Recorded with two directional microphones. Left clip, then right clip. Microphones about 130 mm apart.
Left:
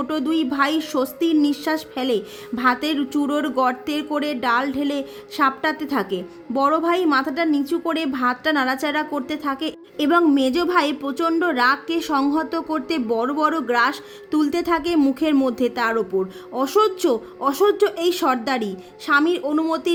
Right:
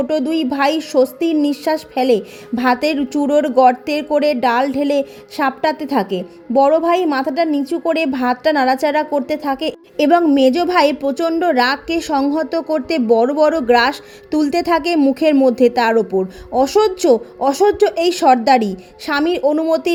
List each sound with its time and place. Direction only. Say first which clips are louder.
0.1 s a woman's voice: right 5 dB; 20° right (ahead or behind)